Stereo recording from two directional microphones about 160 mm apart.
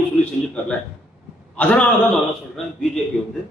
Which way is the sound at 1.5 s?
10° left (ahead or behind).